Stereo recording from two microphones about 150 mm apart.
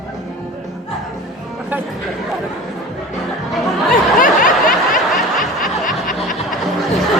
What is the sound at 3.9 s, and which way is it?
Snicker, 65° left (ahead or behind).